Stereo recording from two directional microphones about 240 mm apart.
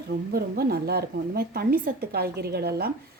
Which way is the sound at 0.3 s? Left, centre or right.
Right.